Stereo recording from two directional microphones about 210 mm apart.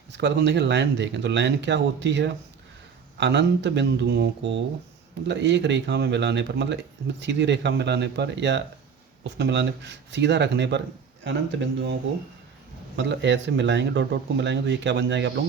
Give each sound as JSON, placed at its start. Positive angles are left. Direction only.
{"t": 0.1, "sound": "speech", "side_deg": -55}
{"t": 5.3, "sound": "speech", "side_deg": -55}
{"t": 13.0, "sound": "speech", "side_deg": -60}